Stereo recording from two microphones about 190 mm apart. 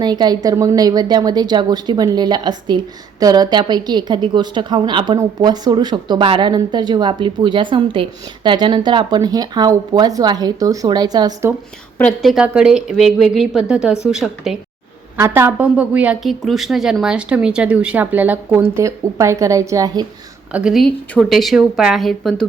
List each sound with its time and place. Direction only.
0.0 s a woman's voice: 20° right (ahead or behind)
11.9 s a woman's voice: 5° left (ahead or behind); by 20.1 s 20° right (ahead or behind)
20.5 s speech: 5° right (ahead or behind)